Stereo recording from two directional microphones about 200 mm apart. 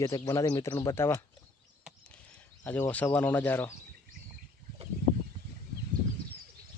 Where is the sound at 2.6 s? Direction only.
10° left (ahead or behind).